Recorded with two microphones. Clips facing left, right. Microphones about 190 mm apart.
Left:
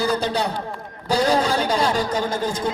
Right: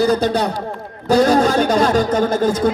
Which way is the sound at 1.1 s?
50° right (ahead or behind).